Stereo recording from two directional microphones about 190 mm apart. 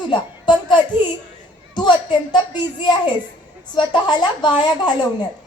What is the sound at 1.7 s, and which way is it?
Speech, 25° left (ahead or behind).